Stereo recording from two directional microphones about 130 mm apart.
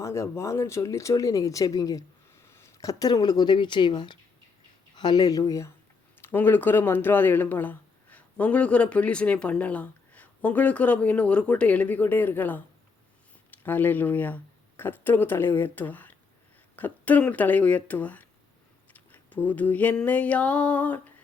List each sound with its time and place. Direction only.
0.0 s speech: 20° left (ahead or behind)